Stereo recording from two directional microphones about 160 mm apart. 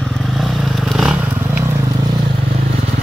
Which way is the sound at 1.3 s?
15° right (ahead or behind).